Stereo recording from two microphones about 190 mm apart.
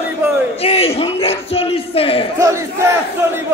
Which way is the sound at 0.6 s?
30° left (ahead or behind).